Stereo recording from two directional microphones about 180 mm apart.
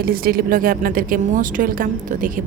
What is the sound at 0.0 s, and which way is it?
A woman's voice, 55° right (ahead or behind).